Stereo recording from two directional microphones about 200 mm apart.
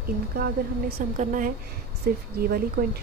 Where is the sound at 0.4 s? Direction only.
50° right (ahead or behind).